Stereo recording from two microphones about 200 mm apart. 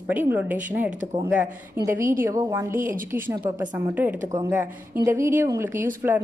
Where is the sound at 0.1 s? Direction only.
10° right (ahead or behind).